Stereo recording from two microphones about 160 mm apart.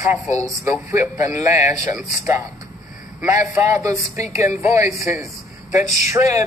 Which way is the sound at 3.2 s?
15° right (ahead or behind).